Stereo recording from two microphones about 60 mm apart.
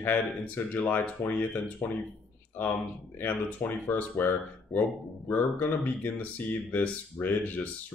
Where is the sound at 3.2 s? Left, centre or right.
Left.